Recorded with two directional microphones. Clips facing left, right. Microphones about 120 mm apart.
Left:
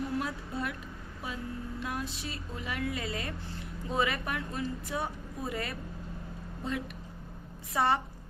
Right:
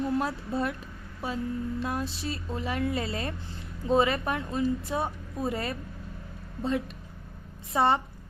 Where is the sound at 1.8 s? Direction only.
35° right (ahead or behind).